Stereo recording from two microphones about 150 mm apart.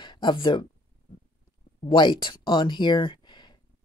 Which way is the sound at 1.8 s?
30° left (ahead or behind).